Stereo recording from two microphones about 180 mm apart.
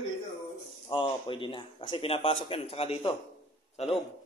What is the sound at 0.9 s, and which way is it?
A man's voice, 25° left (ahead or behind).